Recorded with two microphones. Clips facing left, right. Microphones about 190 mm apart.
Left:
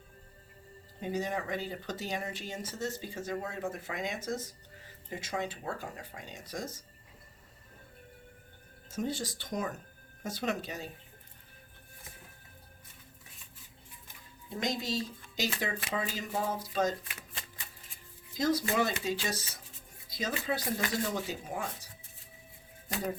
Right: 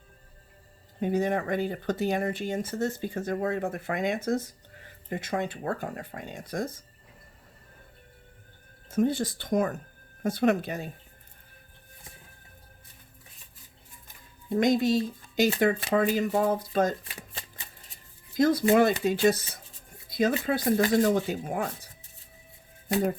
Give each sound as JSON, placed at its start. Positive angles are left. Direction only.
{"t": 1.0, "sound": "speech", "side_deg": -55}
{"t": 8.9, "sound": "speech", "side_deg": -55}
{"t": 14.5, "sound": "speech", "side_deg": -55}
{"t": 17.0, "sound": "speech", "side_deg": -30}
{"t": 18.3, "sound": "speech", "side_deg": -55}